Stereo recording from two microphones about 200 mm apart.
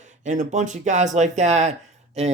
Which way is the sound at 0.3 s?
35° right (ahead or behind).